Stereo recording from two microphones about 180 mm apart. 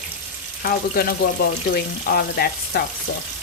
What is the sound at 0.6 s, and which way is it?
Speech, 55° left (ahead or behind).